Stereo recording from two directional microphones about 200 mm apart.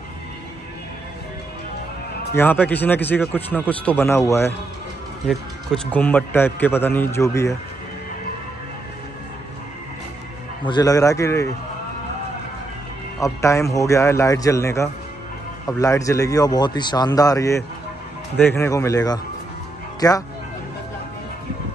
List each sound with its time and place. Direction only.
2.3 s speech: 10° left (ahead or behind)
5.9 s speech: 10° left (ahead or behind)
10.6 s speech: 20° left (ahead or behind)
13.2 s speech: 15° left (ahead or behind)